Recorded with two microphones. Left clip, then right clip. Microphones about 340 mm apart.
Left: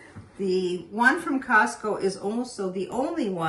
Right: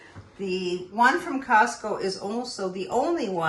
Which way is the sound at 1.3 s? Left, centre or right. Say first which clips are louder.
Right 1 dB; centre.